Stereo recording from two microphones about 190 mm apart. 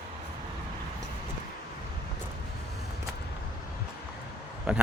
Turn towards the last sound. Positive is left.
turn(degrees=-5)  # may be behind; listen again after turning